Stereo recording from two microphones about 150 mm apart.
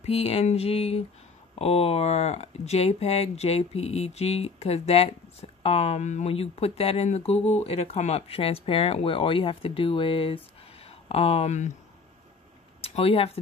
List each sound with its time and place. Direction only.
0.0 s speech: 40° left (ahead or behind)
12.8 s speech: 40° left (ahead or behind)